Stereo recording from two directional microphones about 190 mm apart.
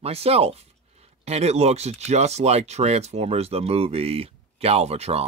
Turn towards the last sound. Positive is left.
turn(degrees=-35)  # may be behind; listen again after turning